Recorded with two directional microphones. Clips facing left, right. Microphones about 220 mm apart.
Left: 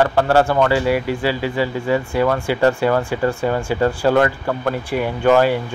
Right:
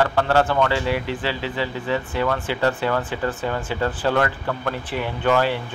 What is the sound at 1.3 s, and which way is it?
Speech, 45° left (ahead or behind).